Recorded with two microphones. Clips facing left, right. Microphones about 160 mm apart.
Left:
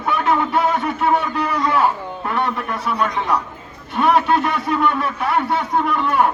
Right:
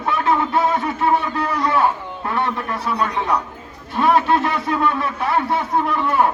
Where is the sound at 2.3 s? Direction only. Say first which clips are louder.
Even; centre (ahead or behind).